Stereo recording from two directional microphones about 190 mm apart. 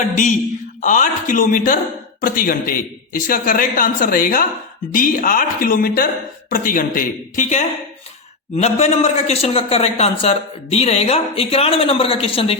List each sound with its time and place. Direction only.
0.8 s a man's voice: 40° left (ahead or behind)